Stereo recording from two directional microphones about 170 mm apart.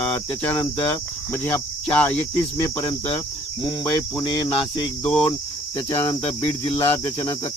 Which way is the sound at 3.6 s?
20° left (ahead or behind).